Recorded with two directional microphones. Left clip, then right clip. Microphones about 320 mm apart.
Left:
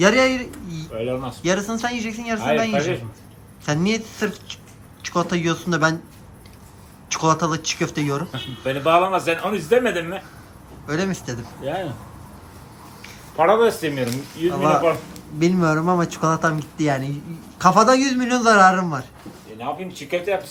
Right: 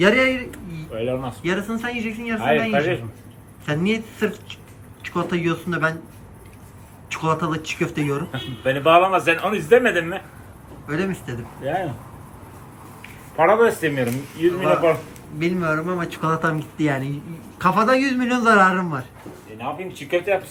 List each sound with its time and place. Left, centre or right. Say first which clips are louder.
0.0 s a man's voice: left 1 dB; centre
7.1 s a man's voice: left 3 dB; centre
13.0 s a man's voice: right 1 dB; centre